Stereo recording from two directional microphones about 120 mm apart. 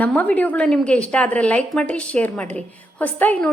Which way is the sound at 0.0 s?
10° left (ahead or behind).